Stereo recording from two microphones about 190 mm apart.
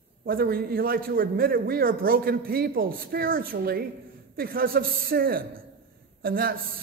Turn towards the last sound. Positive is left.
turn(degrees=-50)  # may be behind; listen again after turning